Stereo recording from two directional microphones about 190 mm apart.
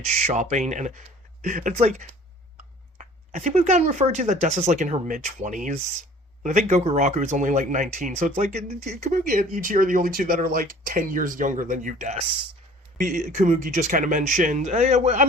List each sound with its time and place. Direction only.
0.0 s speech: 35° right (ahead or behind)